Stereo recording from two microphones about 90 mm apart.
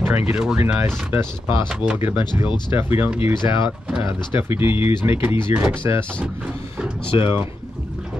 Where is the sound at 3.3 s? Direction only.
65° left (ahead or behind).